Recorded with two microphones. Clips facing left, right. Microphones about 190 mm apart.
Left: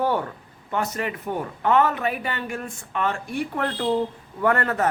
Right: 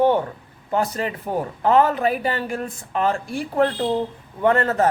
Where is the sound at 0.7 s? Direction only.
30° right (ahead or behind).